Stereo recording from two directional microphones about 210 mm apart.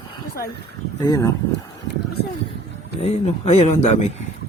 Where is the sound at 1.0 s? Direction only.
15° left (ahead or behind).